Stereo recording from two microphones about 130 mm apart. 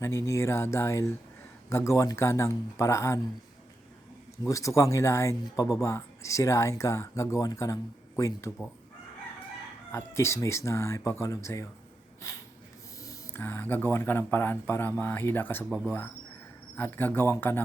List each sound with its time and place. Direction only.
0.0 s speech: 20° left (ahead or behind)
4.4 s speech: 25° left (ahead or behind)
9.9 s speech: 20° left (ahead or behind)
16.7 s speech: 15° left (ahead or behind)